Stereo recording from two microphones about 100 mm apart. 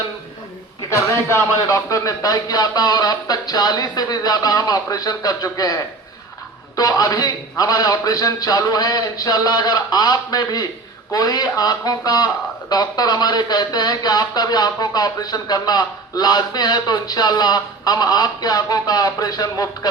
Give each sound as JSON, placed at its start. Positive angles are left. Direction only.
{"t": 0.9, "sound": "a man's voice", "side_deg": 30}